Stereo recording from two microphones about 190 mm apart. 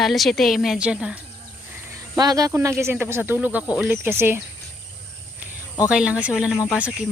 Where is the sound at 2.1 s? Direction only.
20° right (ahead or behind).